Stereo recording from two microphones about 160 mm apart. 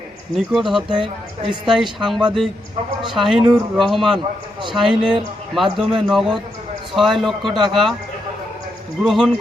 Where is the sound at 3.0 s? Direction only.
Centre (ahead or behind).